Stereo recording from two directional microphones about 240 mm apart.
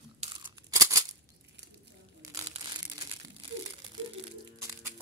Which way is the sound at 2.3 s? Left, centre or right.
Centre.